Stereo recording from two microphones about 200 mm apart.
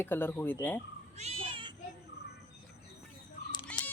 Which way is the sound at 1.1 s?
30° right (ahead or behind).